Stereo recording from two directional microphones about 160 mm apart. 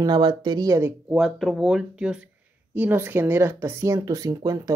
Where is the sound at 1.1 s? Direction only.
Centre (ahead or behind).